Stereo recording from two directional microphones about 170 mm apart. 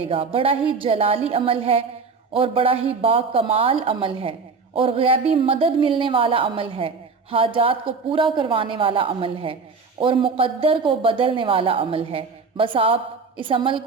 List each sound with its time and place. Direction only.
0.1 s a woman's voice: 30° right (ahead or behind)